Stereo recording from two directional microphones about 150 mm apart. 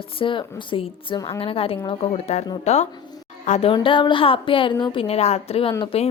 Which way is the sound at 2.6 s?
50° left (ahead or behind).